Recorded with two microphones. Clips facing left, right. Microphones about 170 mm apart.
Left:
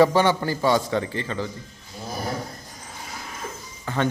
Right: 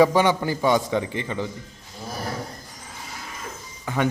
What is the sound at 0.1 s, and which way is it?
Speech, 15° right (ahead or behind).